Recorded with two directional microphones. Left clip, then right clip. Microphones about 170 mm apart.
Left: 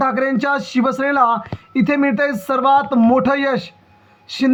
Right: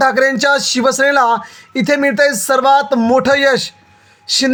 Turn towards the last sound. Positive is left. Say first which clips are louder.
# right 5 dB
turn(degrees=-35)  # may be behind; listen again after turning